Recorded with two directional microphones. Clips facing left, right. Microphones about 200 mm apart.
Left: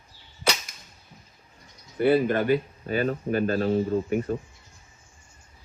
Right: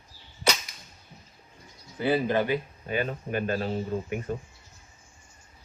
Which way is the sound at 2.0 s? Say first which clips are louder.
Left 4 dB; 55° left (ahead or behind).